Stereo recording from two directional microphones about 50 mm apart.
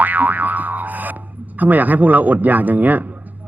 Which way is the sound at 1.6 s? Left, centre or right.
Right.